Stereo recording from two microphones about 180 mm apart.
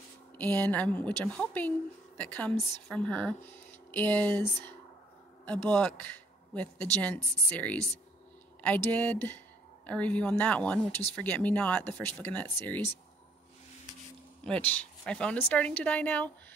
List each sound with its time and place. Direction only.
0.4 s a woman's voice: 10° left (ahead or behind)
14.4 s a woman's voice: 5° left (ahead or behind)